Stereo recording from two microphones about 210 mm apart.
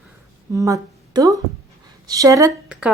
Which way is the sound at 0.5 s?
15° right (ahead or behind).